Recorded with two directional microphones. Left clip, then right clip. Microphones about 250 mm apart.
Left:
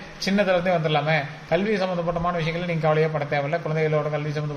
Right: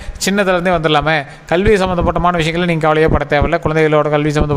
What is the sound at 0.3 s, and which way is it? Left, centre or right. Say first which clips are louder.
A man's voice: right 7 dB; right.